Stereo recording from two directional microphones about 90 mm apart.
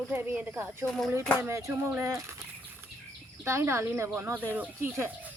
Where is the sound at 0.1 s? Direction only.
20° right (ahead or behind).